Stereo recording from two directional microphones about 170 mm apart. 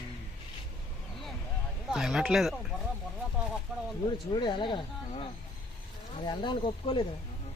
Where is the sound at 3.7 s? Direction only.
Centre (ahead or behind).